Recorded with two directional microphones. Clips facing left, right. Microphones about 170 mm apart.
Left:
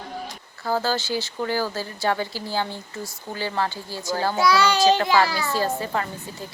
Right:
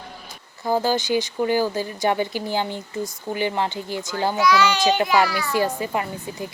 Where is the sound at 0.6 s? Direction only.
15° right (ahead or behind).